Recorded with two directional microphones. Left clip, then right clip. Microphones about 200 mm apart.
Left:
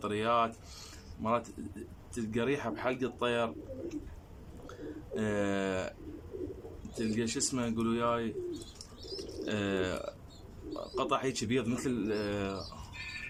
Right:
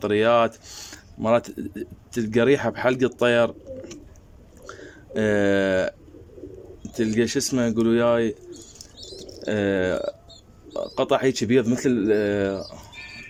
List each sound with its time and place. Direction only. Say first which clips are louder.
0.0 s speech: right 11 dB; 45° right (ahead or behind)
5.1 s speech: right 13 dB; 45° right (ahead or behind)
7.0 s speech: right 11 dB; 45° right (ahead or behind)
9.5 s speech: right 12 dB; 40° right (ahead or behind)